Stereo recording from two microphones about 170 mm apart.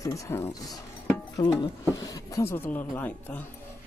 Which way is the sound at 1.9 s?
20° left (ahead or behind).